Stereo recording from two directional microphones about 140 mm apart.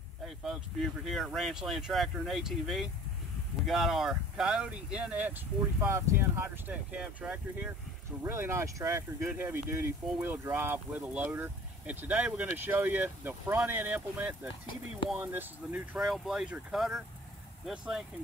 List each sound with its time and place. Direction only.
0.2 s speech: centre (ahead or behind)
5.8 s speech: 20° right (ahead or behind)
16.0 s speech: 5° right (ahead or behind)